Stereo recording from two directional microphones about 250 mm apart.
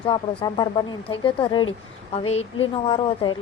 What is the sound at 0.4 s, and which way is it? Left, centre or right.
A woman's voice, centre.